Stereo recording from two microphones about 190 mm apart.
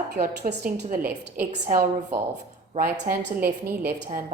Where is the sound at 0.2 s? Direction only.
45° right (ahead or behind).